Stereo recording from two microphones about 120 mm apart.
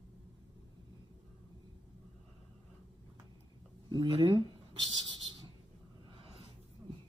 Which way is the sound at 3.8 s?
40° right (ahead or behind).